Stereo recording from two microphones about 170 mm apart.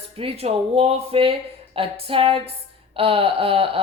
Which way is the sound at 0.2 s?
35° right (ahead or behind).